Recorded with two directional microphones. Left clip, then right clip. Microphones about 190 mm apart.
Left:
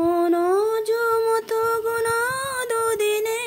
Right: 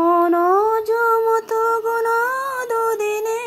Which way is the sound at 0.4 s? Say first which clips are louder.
Right 4 dB; 15° left (ahead or behind).